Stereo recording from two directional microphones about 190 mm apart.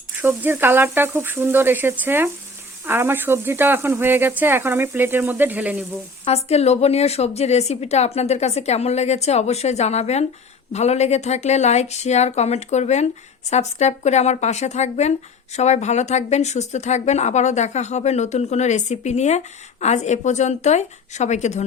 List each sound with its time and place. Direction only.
0.2 s speech: 10° right (ahead or behind)
6.2 s a woman's voice: 35° left (ahead or behind)